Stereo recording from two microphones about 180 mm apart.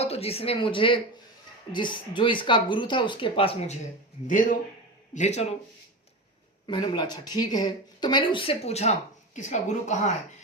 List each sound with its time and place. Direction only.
0.0 s speech: 35° left (ahead or behind)
4.3 s a man's voice: 45° left (ahead or behind)
6.7 s speech: 25° left (ahead or behind); by 10.1 s 40° left (ahead or behind)